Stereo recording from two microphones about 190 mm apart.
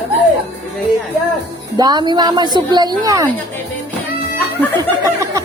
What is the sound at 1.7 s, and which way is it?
A woman's voice, 20° right (ahead or behind).